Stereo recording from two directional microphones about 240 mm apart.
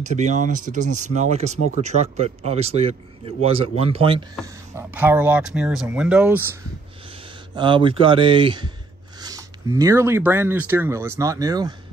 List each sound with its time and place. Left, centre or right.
0.0 s speech: right
4.7 s speech: centre
7.5 s speech: centre